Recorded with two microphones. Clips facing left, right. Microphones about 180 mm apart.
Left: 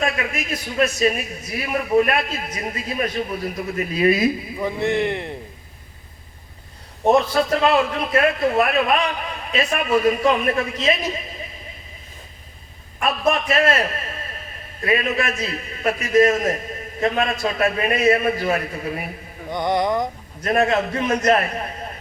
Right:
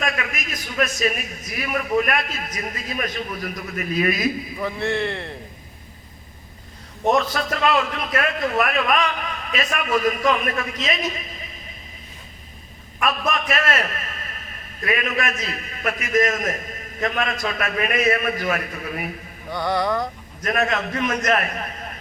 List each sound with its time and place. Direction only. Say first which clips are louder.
0.0 s a man's voice: left 3 dB; 30° left (ahead or behind)
4.6 s speech: left 3 dB; 15° left (ahead or behind)
7.6 s a man's voice: left 3 dB; 30° left (ahead or behind)
13.0 s a man's voice: left 3 dB; 30° left (ahead or behind)
19.5 s a man's voice: left 2 dB; 20° left (ahead or behind)
20.4 s a man's voice: left 4 dB; 30° left (ahead or behind)